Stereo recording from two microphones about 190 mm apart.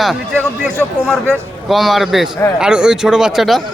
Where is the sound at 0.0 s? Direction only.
Centre (ahead or behind).